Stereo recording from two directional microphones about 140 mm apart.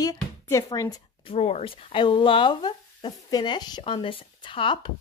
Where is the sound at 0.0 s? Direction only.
25° left (ahead or behind).